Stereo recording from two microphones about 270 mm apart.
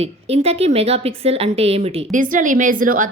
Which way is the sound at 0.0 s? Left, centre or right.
Right.